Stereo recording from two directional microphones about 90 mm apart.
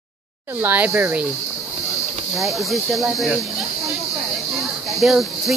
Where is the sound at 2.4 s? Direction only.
Centre (ahead or behind).